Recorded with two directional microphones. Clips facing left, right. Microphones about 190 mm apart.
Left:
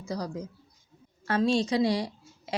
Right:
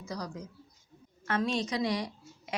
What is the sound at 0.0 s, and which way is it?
A woman's voice, 30° left (ahead or behind).